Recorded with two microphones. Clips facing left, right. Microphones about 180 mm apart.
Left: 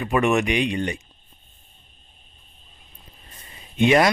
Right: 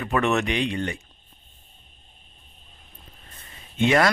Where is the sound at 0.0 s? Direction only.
15° left (ahead or behind).